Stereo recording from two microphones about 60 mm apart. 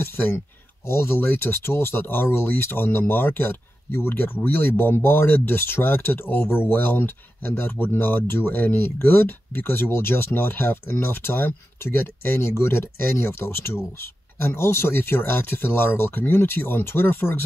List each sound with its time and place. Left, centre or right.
0.0 s speech: left